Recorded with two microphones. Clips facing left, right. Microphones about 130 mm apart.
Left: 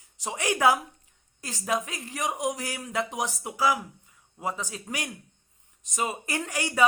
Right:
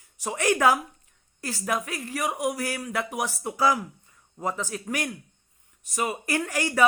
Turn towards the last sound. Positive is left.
turn(degrees=15)  # may be behind; listen again after turning